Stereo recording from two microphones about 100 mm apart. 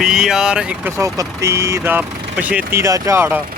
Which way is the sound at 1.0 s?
30° right (ahead or behind).